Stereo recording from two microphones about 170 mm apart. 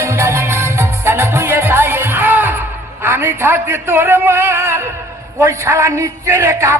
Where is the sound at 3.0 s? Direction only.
15° right (ahead or behind).